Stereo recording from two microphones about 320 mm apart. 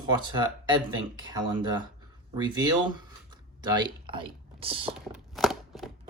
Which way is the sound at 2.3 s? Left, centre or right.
Centre.